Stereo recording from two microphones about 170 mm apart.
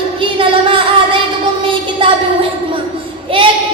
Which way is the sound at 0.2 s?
30° right (ahead or behind).